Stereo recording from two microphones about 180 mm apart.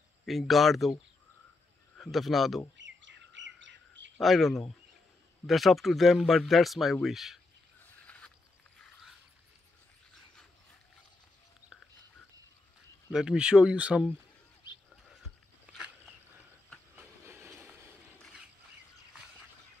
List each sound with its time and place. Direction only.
0.2 s speech: centre (ahead or behind)
2.0 s speech: centre (ahead or behind)
2.8 s chirp: 85° right
4.2 s speech: centre (ahead or behind)
7.8 s vehicle: 5° left (ahead or behind)
13.1 s speech: 5° right (ahead or behind)
16.9 s train: 15° right (ahead or behind)